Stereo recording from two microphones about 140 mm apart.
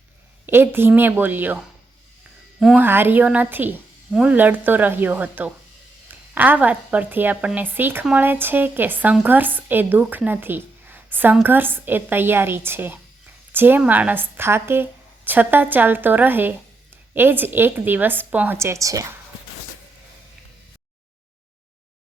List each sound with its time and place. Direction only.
0.4 s speech: 15° right (ahead or behind)
2.7 s speech: 15° right (ahead or behind)